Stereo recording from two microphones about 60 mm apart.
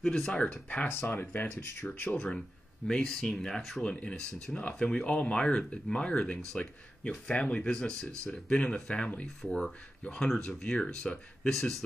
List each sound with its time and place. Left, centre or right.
0.0 s speech: centre
0.8 s speech: left
2.0 s speech: centre